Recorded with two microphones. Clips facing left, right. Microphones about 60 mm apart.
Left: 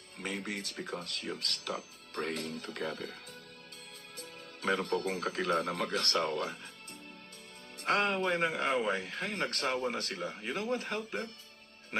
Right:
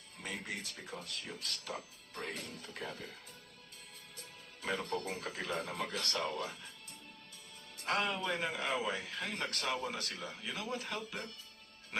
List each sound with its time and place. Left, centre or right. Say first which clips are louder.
0.2 s speech: left 4 dB; left
4.2 s speech: left 8 dB; left
7.9 s a man's voice: left 5 dB; left